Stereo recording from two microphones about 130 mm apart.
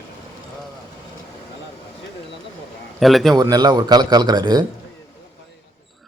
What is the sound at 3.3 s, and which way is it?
A man's voice, 30° right (ahead or behind).